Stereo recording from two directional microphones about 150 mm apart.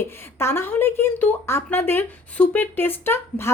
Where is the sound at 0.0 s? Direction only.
15° left (ahead or behind).